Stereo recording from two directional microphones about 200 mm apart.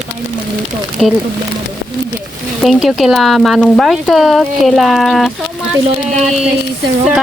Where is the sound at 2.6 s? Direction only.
Centre (ahead or behind).